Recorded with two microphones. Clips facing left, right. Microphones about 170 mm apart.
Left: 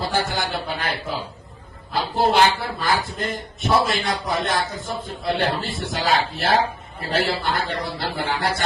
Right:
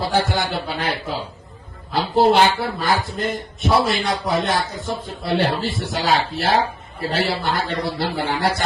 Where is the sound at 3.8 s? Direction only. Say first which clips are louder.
Right 2 dB; 50° left (ahead or behind).